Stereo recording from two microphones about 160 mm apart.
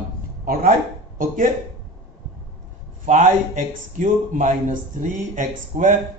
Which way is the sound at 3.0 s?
50° right (ahead or behind).